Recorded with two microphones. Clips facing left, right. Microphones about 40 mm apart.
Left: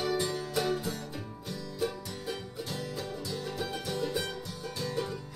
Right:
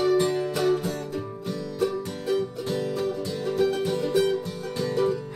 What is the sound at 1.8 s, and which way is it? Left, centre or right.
Music, right.